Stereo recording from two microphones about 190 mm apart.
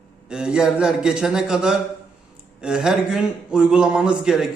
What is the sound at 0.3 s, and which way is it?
A man's voice, 5° right (ahead or behind).